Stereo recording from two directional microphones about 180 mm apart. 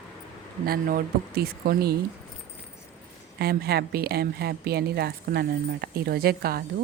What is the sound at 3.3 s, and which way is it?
A woman's voice, 60° right (ahead or behind).